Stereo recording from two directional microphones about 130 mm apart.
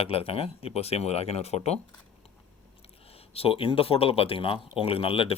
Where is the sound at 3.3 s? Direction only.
50° left (ahead or behind).